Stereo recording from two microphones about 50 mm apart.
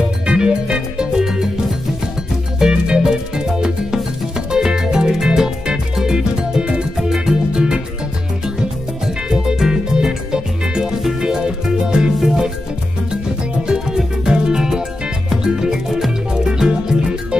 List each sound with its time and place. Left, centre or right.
0.3 s music: centre
2.6 s music: centre
7.0 s music: centre
9.0 s music: centre
13.7 s music: centre